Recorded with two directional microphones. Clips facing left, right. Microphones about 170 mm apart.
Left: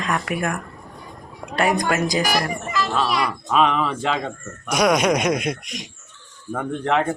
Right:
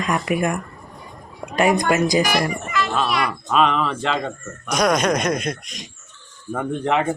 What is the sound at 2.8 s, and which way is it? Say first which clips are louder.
Speech: even; centre (ahead or behind).